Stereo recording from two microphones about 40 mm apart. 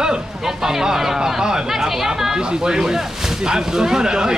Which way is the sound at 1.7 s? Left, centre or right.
Centre.